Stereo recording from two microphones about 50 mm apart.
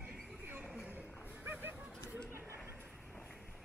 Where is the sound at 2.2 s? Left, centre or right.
Right.